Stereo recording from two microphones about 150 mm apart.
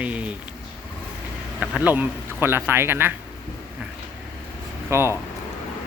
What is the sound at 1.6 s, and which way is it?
Speech, 10° right (ahead or behind).